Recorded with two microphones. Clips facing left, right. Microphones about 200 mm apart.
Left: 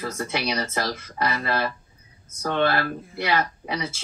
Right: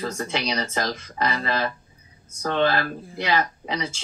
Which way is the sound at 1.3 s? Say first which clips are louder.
Even; 10° left (ahead or behind).